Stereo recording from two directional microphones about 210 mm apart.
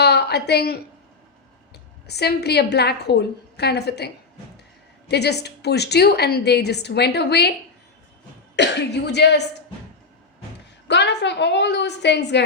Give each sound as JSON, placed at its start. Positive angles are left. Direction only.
{"t": 0.0, "sound": "a woman's voice", "side_deg": 50}
{"t": 8.5, "sound": "a woman's voice", "side_deg": 55}
{"t": 10.8, "sound": "a woman's voice", "side_deg": 55}